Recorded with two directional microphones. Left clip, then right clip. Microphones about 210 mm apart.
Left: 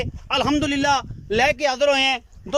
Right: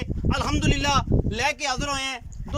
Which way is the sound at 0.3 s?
40° left (ahead or behind).